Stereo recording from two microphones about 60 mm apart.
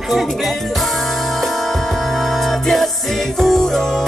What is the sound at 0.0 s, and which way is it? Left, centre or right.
Music, centre.